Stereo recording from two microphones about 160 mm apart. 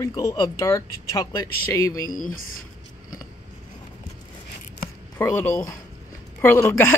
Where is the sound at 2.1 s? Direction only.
60° left (ahead or behind).